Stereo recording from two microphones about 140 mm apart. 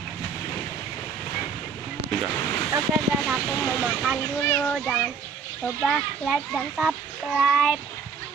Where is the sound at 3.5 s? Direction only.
15° left (ahead or behind).